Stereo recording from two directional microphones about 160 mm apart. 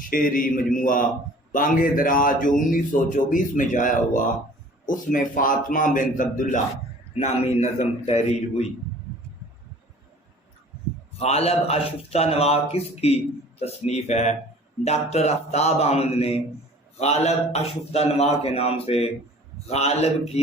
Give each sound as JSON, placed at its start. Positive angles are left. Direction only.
{"t": 0.0, "sound": "a man's voice", "side_deg": 60}
{"t": 7.1, "sound": "a man's voice", "side_deg": 40}
{"t": 11.2, "sound": "a man's voice", "side_deg": 40}